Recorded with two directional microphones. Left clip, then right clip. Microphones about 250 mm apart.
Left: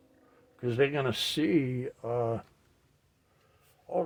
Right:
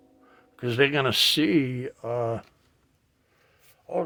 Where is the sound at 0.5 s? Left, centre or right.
Right; by 2.5 s centre.